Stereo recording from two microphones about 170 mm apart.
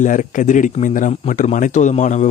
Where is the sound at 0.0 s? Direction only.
50° left (ahead or behind).